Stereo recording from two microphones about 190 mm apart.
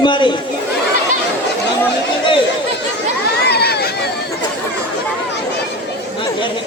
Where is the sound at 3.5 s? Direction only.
55° left (ahead or behind).